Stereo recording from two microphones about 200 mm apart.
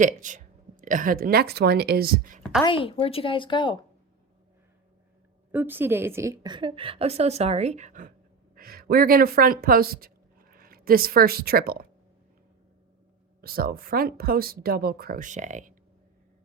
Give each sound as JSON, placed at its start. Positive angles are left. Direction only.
{"t": 0.0, "sound": "speech", "side_deg": -40}
{"t": 2.6, "sound": "speech", "side_deg": 25}
{"t": 5.5, "sound": "a woman's voice", "side_deg": -10}
{"t": 13.4, "sound": "speech", "side_deg": -50}